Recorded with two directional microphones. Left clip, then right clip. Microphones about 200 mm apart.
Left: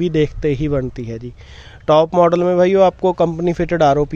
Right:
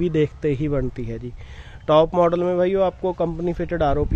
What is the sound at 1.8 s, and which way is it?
A man's voice, 25° left (ahead or behind).